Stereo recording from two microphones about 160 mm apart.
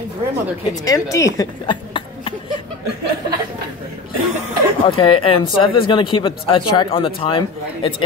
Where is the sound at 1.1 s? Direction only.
20° left (ahead or behind).